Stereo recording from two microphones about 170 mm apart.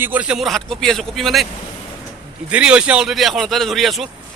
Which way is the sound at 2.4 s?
5° right (ahead or behind).